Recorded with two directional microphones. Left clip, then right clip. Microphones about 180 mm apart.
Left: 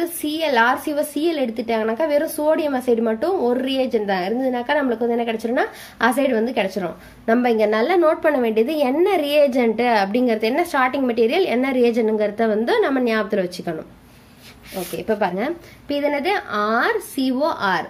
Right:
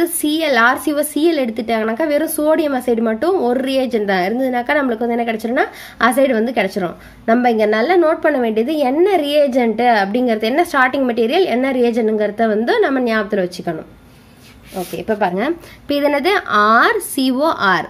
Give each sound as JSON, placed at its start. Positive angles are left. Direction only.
{"t": 0.0, "sound": "a woman's voice", "side_deg": -20}
{"t": 15.0, "sound": "speech", "side_deg": -5}
{"t": 15.3, "sound": "speech", "side_deg": -25}